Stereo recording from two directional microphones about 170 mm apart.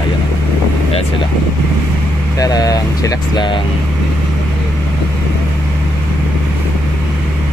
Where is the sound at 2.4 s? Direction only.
20° left (ahead or behind).